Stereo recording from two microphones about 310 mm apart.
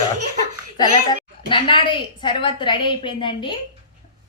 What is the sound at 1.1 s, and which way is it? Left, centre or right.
Speech, centre.